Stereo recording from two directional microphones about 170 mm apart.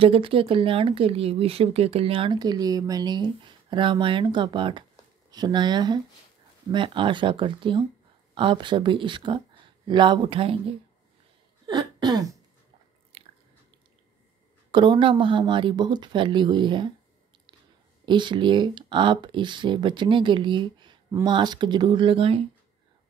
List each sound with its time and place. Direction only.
0.0 s speech: 30° right (ahead or behind)
11.6 s a sound: 25° right (ahead or behind)
13.1 s biting: 35° right (ahead or behind)
14.7 s speech: 30° right (ahead or behind)
18.0 s speech: 25° right (ahead or behind)